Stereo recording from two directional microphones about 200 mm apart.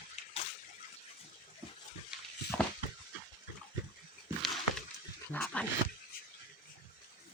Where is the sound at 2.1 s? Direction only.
5° right (ahead or behind).